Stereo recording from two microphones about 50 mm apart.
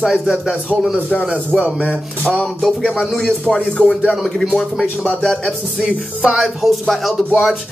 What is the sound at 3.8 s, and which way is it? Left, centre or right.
Speech, centre.